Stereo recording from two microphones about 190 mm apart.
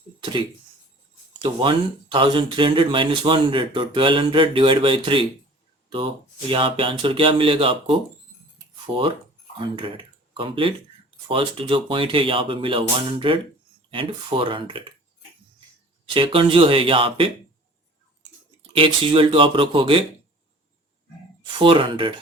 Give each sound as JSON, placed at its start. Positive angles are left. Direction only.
{"t": 1.4, "sound": "speech", "side_deg": -25}
{"t": 9.6, "sound": "speech", "side_deg": -25}
{"t": 16.1, "sound": "speech", "side_deg": -25}
{"t": 18.6, "sound": "speech", "side_deg": -30}
{"t": 21.4, "sound": "speech", "side_deg": -25}